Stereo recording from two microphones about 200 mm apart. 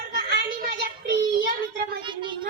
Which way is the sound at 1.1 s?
50° right (ahead or behind).